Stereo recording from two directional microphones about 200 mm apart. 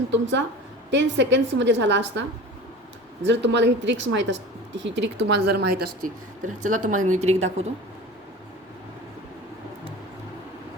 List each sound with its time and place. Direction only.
0.1 s a woman's voice: 65° right (ahead or behind)
3.2 s a woman's voice: 60° right (ahead or behind)
6.6 s a woman's voice: 40° right (ahead or behind)